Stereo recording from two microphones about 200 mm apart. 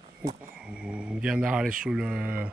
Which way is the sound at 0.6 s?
5° right (ahead or behind).